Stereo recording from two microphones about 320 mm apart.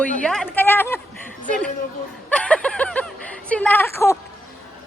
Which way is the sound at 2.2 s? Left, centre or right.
Centre.